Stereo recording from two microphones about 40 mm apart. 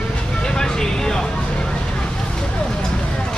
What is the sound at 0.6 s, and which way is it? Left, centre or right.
Vehicle, centre.